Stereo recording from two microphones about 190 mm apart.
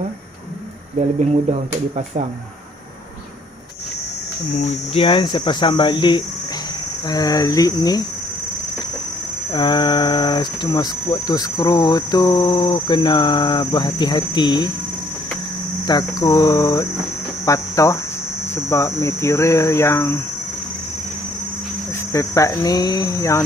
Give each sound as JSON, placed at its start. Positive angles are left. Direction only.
{"t": 4.6, "sound": "speech", "side_deg": 35}
{"t": 9.5, "sound": "speech", "side_deg": 25}
{"t": 15.9, "sound": "speech", "side_deg": 20}
{"t": 22.1, "sound": "speech", "side_deg": 15}